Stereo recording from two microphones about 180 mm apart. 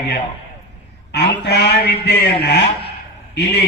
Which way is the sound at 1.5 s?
65° left (ahead or behind).